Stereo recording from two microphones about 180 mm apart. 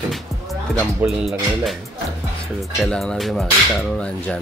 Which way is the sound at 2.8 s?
5° left (ahead or behind).